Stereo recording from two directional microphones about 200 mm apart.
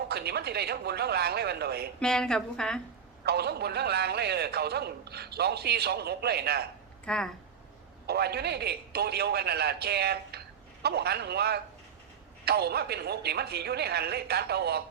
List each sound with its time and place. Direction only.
0.1 s a man's voice: 55° right (ahead or behind)
2.0 s a woman's voice: 5° left (ahead or behind)
3.2 s a man's voice: 55° right (ahead or behind)
7.0 s speech: 5° left (ahead or behind)
8.0 s a man's voice: 55° right (ahead or behind)